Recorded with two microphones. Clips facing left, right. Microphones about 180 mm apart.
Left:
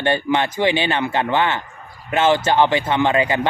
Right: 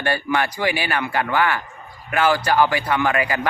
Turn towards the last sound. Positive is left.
turn(degrees=25)  # may be behind; listen again after turning